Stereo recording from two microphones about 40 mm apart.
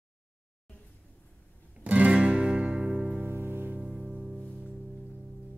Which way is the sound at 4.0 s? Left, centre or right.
Right.